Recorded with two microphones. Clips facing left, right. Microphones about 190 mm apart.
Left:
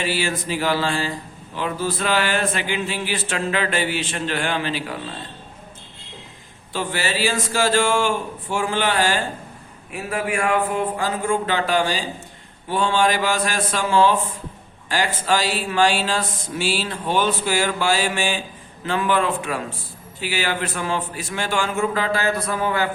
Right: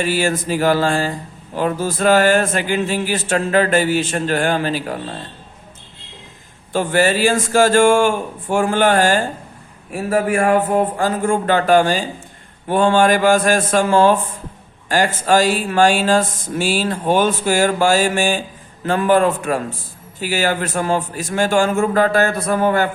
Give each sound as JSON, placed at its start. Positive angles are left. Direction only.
{"t": 0.0, "sound": "speech", "side_deg": -45}
{"t": 6.7, "sound": "speech", "side_deg": -50}